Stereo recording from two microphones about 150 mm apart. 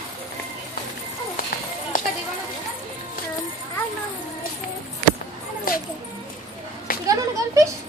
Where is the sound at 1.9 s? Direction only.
65° left (ahead or behind).